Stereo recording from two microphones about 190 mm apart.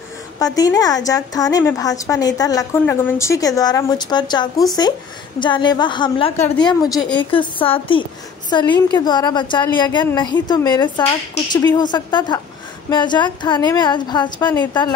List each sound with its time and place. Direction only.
0.4 s a woman's voice: 20° left (ahead or behind)
6.6 s a woman's voice: 20° left (ahead or behind)